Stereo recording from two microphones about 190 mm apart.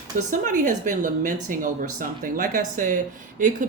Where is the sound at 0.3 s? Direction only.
40° right (ahead or behind).